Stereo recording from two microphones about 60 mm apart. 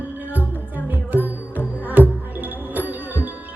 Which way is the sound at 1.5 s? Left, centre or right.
Right.